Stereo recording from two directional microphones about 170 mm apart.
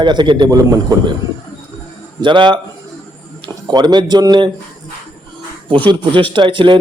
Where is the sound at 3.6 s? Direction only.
25° right (ahead or behind).